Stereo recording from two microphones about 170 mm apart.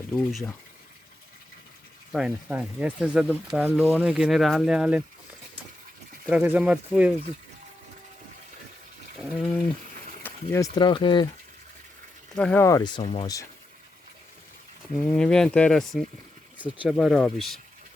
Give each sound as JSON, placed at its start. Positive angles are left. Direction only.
{"t": 0.1, "sound": "speech", "side_deg": 0}
{"t": 2.1, "sound": "speech", "side_deg": -5}
{"t": 6.2, "sound": "speech", "side_deg": -10}
{"t": 9.1, "sound": "speech", "side_deg": 0}
{"t": 10.5, "sound": "speech", "side_deg": 20}
{"t": 12.3, "sound": "speech", "side_deg": 5}
{"t": 12.6, "sound": "speech", "side_deg": 20}
{"t": 15.0, "sound": "speech", "side_deg": 5}